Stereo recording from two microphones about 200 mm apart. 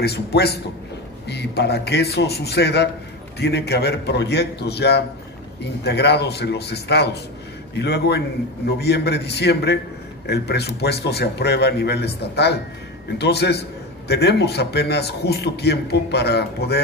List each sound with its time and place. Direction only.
0.0 s a man's voice: 55° left (ahead or behind)